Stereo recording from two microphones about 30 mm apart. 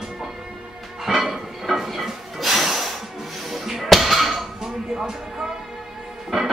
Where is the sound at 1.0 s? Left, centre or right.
Centre.